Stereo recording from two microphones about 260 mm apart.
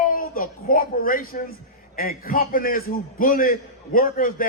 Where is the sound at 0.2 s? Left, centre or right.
Left.